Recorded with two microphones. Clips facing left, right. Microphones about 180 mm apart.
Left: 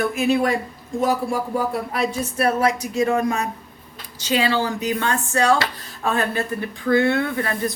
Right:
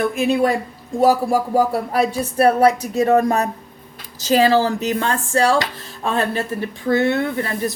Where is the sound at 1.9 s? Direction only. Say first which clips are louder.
Right 7 dB; 35° right (ahead or behind).